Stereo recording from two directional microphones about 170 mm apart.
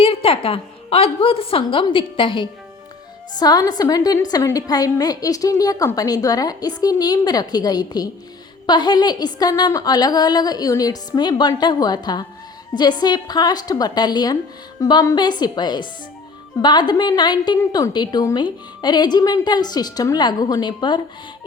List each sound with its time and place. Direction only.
0.0 s a woman's voice: 30° left (ahead or behind)